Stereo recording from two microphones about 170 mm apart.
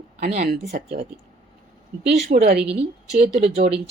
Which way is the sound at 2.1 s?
75° right (ahead or behind).